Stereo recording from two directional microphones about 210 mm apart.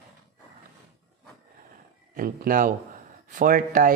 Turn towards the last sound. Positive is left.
turn(degrees=-40)  # may be behind; listen again after turning